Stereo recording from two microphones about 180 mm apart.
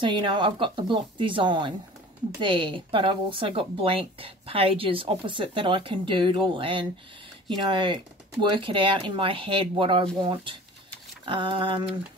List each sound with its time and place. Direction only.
0.0 s speech: 25° right (ahead or behind)